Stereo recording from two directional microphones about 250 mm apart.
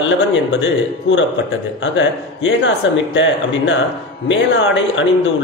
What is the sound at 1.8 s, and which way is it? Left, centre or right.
A man's voice, left.